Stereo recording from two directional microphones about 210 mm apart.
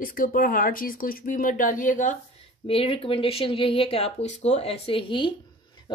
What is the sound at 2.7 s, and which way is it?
A woman's voice, 25° left (ahead or behind).